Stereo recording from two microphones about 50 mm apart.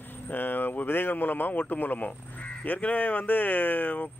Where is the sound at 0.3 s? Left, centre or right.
Left.